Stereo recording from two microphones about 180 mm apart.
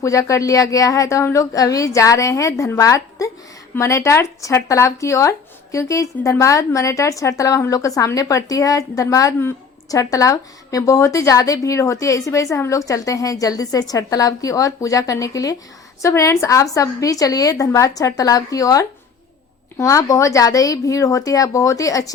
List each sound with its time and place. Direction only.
0.0 s a woman's voice: 15° left (ahead or behind)